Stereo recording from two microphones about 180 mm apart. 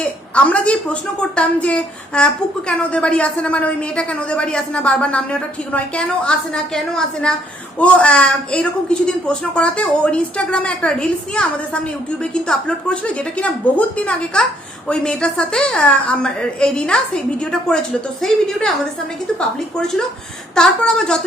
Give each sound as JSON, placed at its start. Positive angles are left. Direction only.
{"t": 0.0, "sound": "a woman's voice", "side_deg": 5}
{"t": 19.4, "sound": "a woman's voice", "side_deg": 5}